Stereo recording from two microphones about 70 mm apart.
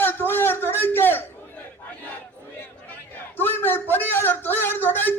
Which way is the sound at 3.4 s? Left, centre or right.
Left.